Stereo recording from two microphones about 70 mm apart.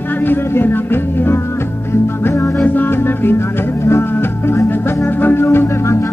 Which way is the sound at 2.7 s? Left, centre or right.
Left.